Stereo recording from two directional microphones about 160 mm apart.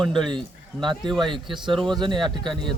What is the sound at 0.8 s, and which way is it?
Speech, 30° right (ahead or behind).